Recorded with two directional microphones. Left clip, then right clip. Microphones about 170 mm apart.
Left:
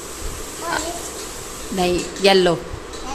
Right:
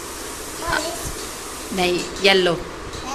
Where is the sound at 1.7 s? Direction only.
30° left (ahead or behind).